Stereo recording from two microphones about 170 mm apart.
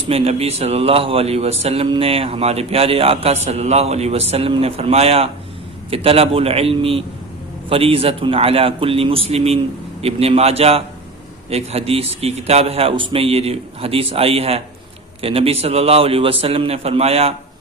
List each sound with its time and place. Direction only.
0.1 s a man's voice: 35° right (ahead or behind)